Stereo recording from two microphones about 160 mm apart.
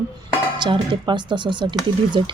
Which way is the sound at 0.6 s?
30° right (ahead or behind).